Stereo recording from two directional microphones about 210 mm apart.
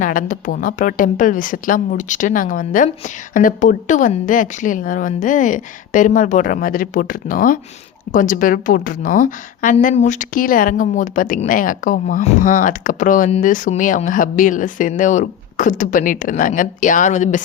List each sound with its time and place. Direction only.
0.0 s a woman's voice: 40° left (ahead or behind)